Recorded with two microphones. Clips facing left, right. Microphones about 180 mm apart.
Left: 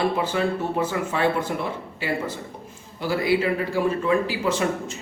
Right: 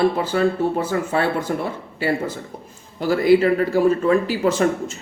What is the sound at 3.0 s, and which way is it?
Speech, 45° right (ahead or behind).